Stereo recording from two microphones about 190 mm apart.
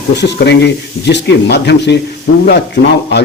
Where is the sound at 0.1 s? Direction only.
65° left (ahead or behind).